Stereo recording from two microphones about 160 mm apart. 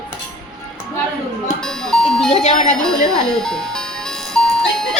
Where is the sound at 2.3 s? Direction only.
45° left (ahead or behind).